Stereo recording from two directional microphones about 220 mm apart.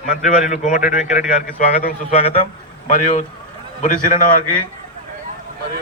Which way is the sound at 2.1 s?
25° left (ahead or behind).